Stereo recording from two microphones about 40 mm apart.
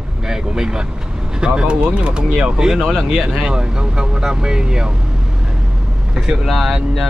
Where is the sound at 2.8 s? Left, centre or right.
Centre.